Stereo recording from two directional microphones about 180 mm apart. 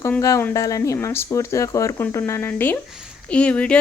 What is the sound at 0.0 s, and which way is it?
Speech, 15° left (ahead or behind).